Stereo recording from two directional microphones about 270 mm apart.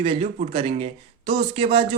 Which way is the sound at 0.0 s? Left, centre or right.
Right.